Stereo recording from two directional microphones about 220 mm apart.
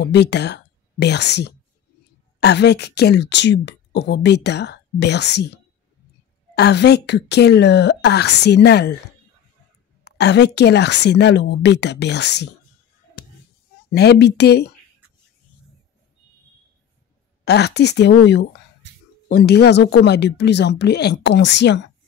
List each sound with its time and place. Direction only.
0.0 s a woman's voice: 50° left (ahead or behind)
10.0 s a woman's voice: 50° left (ahead or behind)
13.9 s a woman's voice: 50° left (ahead or behind)
17.5 s a woman's voice: 50° left (ahead or behind)